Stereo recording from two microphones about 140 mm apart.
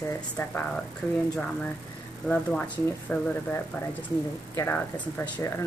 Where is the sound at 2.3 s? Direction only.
10° left (ahead or behind).